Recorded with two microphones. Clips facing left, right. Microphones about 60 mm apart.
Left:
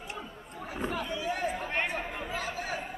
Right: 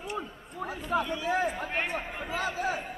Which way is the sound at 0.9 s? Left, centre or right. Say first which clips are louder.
Right 6 dB; right.